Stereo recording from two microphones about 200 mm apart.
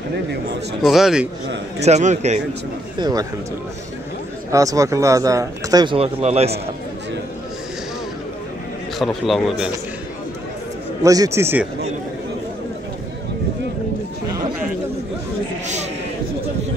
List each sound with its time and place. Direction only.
0.8 s a man's voice: centre (ahead or behind)
1.8 s a man's voice: 35° right (ahead or behind)
3.0 s speech: 20° right (ahead or behind)
4.5 s speech: 15° right (ahead or behind); by 6.6 s 30° right (ahead or behind)
8.9 s a man's voice: centre (ahead or behind)
11.0 s speech: 15° right (ahead or behind)
15.6 s a sound: 35° right (ahead or behind)